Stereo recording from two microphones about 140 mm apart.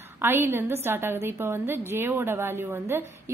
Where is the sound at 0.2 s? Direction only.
15° right (ahead or behind).